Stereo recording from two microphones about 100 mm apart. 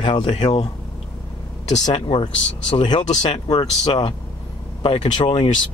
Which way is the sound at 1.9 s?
55° left (ahead or behind).